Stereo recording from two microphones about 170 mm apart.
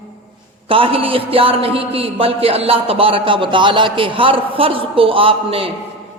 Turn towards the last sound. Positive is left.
turn(degrees=-30)  # may be behind; listen again after turning